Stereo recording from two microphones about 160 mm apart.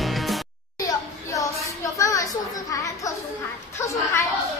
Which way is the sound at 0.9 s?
20° left (ahead or behind).